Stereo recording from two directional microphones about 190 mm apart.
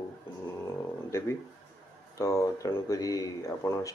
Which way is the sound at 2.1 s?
15° left (ahead or behind).